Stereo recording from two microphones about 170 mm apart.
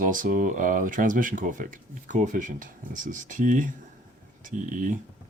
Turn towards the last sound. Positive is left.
turn(degrees=-50)  # may be behind; listen again after turning